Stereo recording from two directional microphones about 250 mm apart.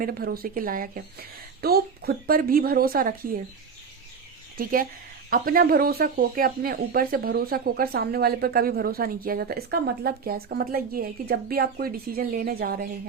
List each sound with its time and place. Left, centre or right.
0.0 s speech: right
4.5 s speech: right